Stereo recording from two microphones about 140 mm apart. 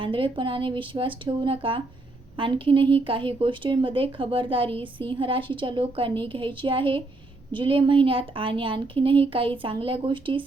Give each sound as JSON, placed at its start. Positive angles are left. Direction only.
{"t": 0.0, "sound": "a woman's voice", "side_deg": -35}